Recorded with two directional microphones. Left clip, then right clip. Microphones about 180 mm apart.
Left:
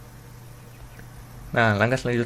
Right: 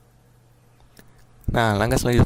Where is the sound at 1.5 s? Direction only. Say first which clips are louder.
Even; 65° right (ahead or behind).